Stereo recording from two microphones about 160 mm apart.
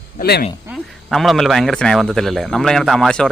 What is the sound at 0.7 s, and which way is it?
Speech, centre (ahead or behind).